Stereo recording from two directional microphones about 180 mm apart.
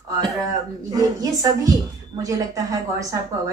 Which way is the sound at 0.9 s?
20° right (ahead or behind).